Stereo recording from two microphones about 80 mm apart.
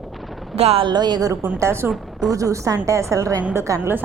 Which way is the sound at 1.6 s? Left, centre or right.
Right.